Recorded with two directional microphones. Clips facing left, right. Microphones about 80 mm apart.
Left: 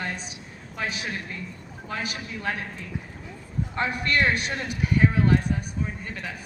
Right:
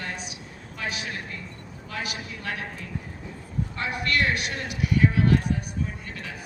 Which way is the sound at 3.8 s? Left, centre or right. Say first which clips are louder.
Left 2 dB; left.